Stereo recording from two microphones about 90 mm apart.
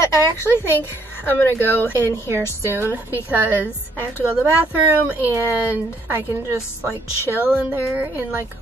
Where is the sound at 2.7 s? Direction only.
25° right (ahead or behind).